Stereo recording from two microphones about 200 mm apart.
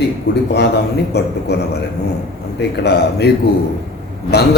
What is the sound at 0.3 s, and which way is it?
A man's voice, 60° left (ahead or behind).